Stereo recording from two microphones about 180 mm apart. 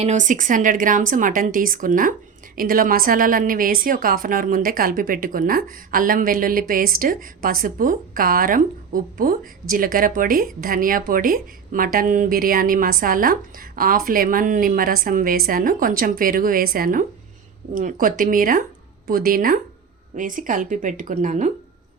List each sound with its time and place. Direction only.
0.0 s a woman's voice: 40° right (ahead or behind)